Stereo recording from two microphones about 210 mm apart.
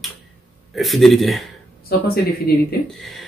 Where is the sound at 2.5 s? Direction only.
50° left (ahead or behind).